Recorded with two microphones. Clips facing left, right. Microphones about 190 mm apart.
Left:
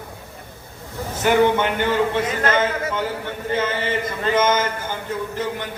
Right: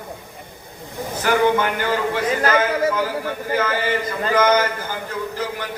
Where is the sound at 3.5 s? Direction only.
25° left (ahead or behind).